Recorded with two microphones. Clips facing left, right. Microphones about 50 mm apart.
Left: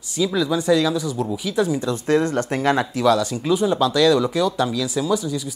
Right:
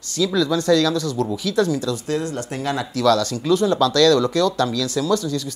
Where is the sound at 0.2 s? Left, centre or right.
Centre; by 2.9 s left.